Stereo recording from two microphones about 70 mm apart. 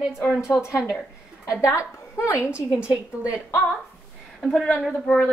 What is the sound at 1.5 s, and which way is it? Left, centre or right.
Speech, left.